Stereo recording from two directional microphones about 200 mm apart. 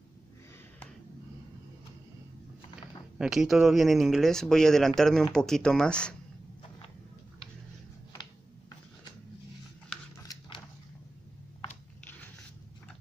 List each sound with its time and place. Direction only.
3.2 s speech: centre (ahead or behind)
8.1 s a sound: 20° left (ahead or behind)
12.0 s zipper: 10° left (ahead or behind)